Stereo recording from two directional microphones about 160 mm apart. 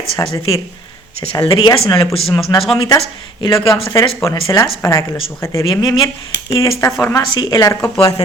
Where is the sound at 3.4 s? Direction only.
30° left (ahead or behind).